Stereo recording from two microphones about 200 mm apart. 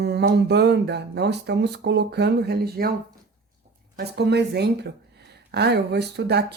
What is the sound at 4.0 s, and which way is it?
Speech, 55° right (ahead or behind).